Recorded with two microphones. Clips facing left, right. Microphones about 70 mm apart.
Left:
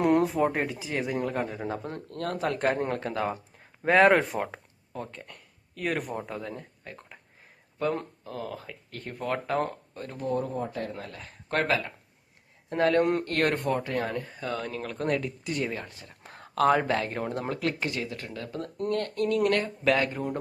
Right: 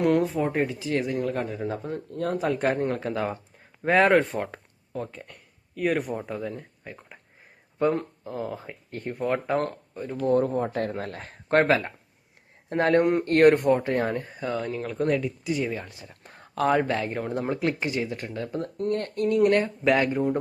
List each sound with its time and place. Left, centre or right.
0.2 s speech: centre
8.2 s speech: centre
10.2 s speech: right
13.0 s speech: centre
13.2 s speech: right
14.6 s speech: centre
17.5 s speech: centre
19.9 s speech: centre